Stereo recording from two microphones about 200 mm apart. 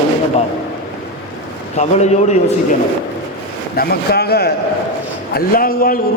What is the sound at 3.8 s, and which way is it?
A man's voice, 50° left (ahead or behind).